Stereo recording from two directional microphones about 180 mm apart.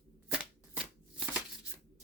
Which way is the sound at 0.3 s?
5° right (ahead or behind).